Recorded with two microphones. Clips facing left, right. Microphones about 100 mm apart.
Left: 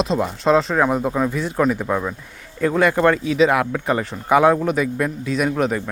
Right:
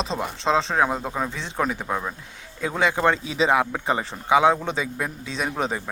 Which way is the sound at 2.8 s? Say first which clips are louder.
Left 4 dB; 15° right (ahead or behind).